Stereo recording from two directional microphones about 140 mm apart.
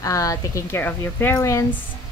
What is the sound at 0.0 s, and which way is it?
A woman's voice, 25° left (ahead or behind).